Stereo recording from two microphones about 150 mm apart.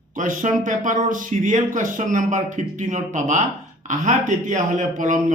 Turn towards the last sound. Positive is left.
turn(degrees=-60)  # may be behind; listen again after turning